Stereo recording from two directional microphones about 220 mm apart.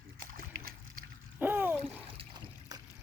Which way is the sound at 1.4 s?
10° right (ahead or behind).